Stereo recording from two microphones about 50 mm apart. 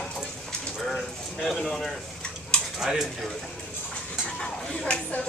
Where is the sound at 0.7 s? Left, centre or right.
Centre.